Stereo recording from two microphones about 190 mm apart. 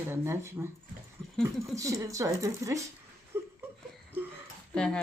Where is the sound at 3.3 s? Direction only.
15° right (ahead or behind).